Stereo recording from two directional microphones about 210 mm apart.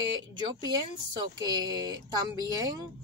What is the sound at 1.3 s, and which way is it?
A woman's voice, 15° right (ahead or behind).